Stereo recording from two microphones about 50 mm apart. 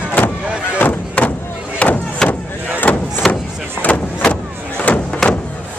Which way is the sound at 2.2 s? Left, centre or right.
Centre.